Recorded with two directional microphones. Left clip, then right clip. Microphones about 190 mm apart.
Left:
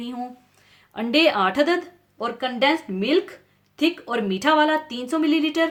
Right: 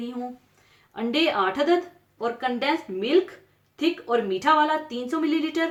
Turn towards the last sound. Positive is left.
turn(degrees=55)  # may be behind; listen again after turning